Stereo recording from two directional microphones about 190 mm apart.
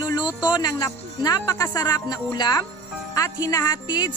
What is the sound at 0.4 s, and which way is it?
A woman's voice, 20° left (ahead or behind).